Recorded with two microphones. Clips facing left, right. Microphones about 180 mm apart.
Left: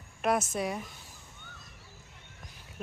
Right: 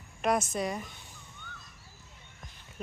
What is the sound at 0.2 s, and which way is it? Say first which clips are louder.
Speech: even; 5° left (ahead or behind).